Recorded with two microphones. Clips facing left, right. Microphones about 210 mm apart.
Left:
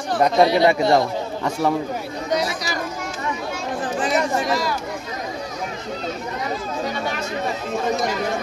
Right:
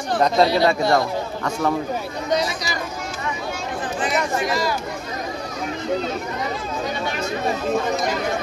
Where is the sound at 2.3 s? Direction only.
5° left (ahead or behind).